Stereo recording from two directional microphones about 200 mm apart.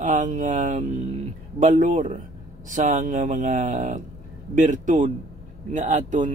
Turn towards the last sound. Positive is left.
turn(degrees=-40)  # may be behind; listen again after turning